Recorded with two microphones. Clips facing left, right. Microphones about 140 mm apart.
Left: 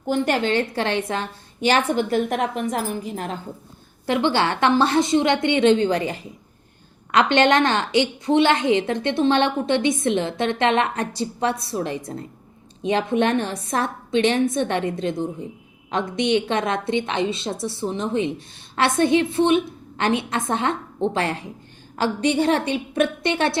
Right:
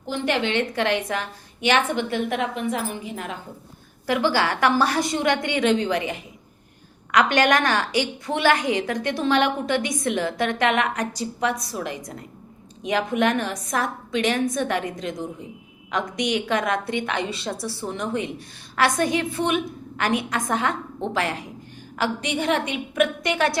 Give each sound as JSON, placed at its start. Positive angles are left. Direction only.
{"t": 0.1, "sound": "a woman's voice", "side_deg": 45}
{"t": 4.0, "sound": "a woman's voice", "side_deg": 25}